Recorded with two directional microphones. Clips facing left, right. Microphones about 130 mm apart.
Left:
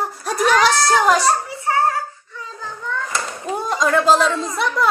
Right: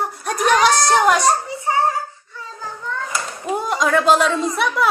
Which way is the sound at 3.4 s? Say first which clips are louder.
Right 1 dB; 5° right (ahead or behind).